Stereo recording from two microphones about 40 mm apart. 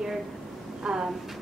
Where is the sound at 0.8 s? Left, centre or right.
Centre.